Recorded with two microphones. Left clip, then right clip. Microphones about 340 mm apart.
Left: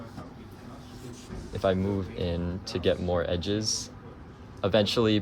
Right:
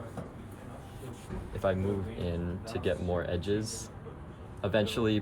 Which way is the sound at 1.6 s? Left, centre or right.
Left.